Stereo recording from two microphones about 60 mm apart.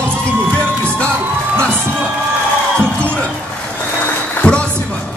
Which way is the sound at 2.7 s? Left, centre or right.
Centre.